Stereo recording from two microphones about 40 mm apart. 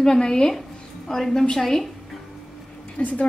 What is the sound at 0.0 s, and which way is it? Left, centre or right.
A woman's voice, centre.